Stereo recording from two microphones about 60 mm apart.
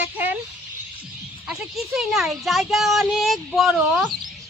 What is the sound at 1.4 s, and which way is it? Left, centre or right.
Speech, centre.